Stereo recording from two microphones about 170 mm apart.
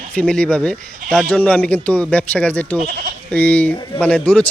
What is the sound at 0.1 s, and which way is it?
A man's voice, 5° left (ahead or behind).